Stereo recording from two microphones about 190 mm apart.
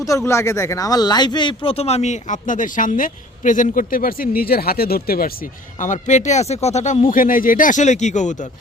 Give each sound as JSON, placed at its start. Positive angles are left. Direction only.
{"t": 0.3, "sound": "a man's voice", "side_deg": 15}
{"t": 5.8, "sound": "a man's voice", "side_deg": 40}